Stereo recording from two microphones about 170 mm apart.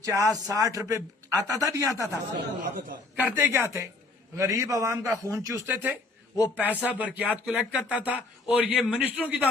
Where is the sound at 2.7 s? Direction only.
55° right (ahead or behind).